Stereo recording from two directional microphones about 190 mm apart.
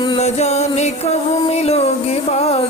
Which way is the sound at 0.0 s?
30° left (ahead or behind).